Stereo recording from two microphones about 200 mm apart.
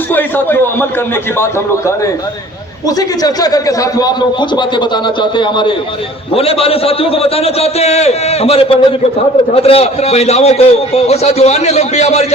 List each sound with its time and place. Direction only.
0.1 s a man's voice: 10° left (ahead or behind)
2.8 s a man's voice: 20° left (ahead or behind); by 12.2 s 35° left (ahead or behind)